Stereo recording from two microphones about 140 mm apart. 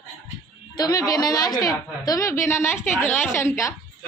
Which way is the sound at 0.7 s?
25° left (ahead or behind).